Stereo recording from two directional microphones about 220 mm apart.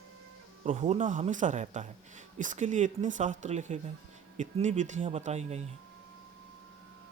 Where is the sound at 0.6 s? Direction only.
30° right (ahead or behind).